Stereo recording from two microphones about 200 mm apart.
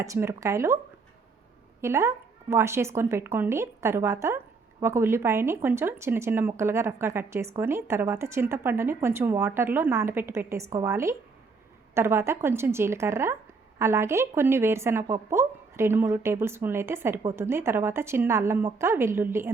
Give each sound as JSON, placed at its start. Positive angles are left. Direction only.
{"t": 0.0, "sound": "speech", "side_deg": -15}
{"t": 1.8, "sound": "speech", "side_deg": -15}